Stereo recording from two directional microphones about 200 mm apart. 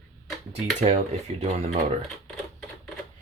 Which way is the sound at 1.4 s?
30° right (ahead or behind).